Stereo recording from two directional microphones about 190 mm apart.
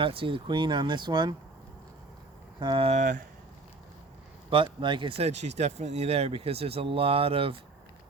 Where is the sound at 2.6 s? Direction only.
25° right (ahead or behind).